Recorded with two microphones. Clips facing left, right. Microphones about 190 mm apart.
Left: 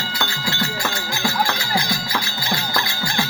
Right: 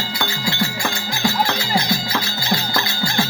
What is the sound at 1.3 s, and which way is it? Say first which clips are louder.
Music: right 2 dB; 25° right (ahead or behind).